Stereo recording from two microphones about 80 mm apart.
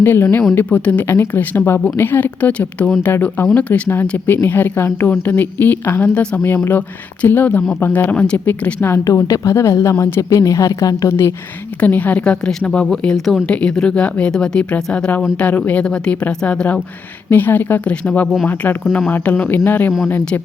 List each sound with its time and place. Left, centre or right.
0.0 s speech: left
8.8 s a woman's voice: left
11.8 s speech: left
17.2 s speech: left